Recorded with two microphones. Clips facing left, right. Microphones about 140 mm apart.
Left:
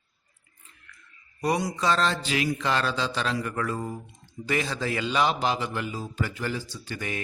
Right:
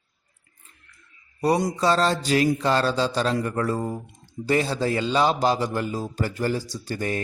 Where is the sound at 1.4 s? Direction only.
35° right (ahead or behind).